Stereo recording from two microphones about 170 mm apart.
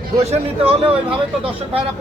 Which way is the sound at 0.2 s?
35° right (ahead or behind).